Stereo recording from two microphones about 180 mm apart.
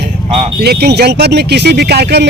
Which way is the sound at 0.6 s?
65° right (ahead or behind).